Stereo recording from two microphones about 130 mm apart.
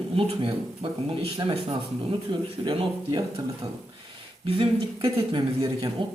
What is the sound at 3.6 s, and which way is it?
Speech, 50° right (ahead or behind).